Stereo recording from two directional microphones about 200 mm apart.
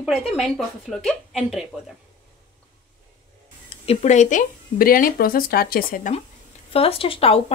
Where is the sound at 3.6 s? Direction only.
30° left (ahead or behind); by 6.1 s 45° left (ahead or behind).